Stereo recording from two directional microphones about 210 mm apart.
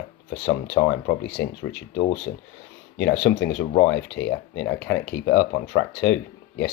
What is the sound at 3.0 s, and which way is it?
Speech, 55° left (ahead or behind).